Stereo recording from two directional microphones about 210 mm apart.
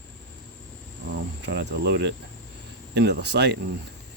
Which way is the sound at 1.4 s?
55° right (ahead or behind).